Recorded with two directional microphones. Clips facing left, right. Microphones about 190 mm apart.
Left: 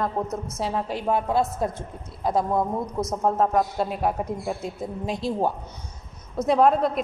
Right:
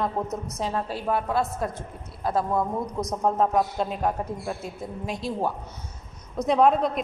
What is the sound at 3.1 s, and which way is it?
A man's voice, 5° left (ahead or behind).